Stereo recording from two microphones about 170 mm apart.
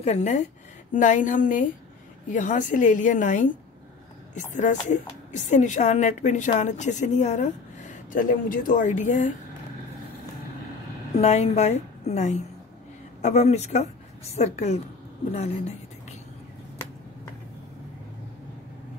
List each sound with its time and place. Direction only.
0.0 s speech: 40° left (ahead or behind)
11.1 s a woman's voice: 40° left (ahead or behind)